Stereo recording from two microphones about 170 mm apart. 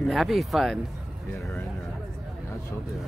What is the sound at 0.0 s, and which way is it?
Speech, centre (ahead or behind).